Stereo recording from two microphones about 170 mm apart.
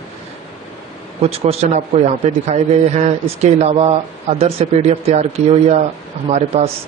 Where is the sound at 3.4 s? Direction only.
40° right (ahead or behind).